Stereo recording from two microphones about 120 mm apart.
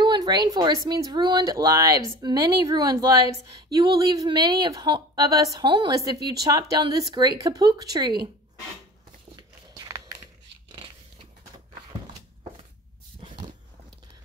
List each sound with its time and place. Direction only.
0.0 s a woman's voice: 35° right (ahead or behind)
9.4 s biting: 30° right (ahead or behind)